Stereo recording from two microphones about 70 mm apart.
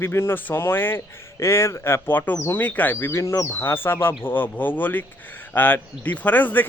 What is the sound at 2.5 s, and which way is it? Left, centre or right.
Speech, left.